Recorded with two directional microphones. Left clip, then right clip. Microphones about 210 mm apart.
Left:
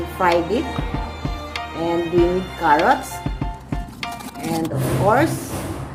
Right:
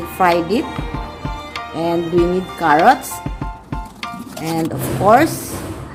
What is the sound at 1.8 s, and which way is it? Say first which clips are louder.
Speech: right 2 dB; 30° right (ahead or behind).